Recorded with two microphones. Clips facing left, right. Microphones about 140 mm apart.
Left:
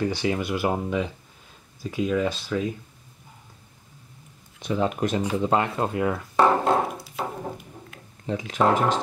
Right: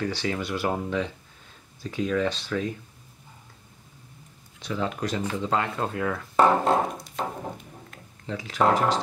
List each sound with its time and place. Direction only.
0.0 s speech: 15° left (ahead or behind)
4.6 s speech: 20° left (ahead or behind)
6.3 s a sound: centre (ahead or behind)
8.3 s speech: 20° left (ahead or behind)